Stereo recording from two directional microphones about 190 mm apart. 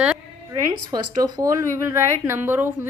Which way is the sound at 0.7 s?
20° right (ahead or behind).